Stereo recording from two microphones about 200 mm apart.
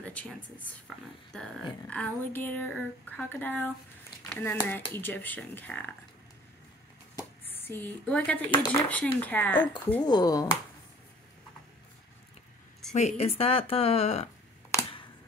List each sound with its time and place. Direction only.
0.0 s chopping: 5° left (ahead or behind)
7.2 s chopping: 10° left (ahead or behind)
10.0 s a woman's voice: 20° left (ahead or behind)
12.9 s a woman's voice: 35° left (ahead or behind)